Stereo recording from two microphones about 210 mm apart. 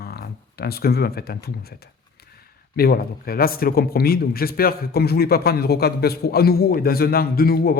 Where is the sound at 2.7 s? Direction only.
45° left (ahead or behind).